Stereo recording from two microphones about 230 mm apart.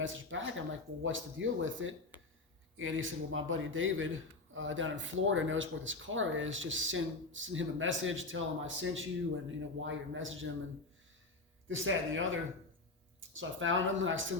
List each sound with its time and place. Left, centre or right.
0.0 s a man's voice: right
11.7 s a man's voice: right